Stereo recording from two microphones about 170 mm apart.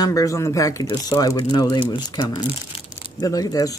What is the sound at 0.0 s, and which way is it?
Speech, 20° left (ahead or behind).